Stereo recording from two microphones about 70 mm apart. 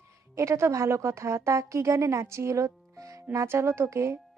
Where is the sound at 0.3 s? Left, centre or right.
Right.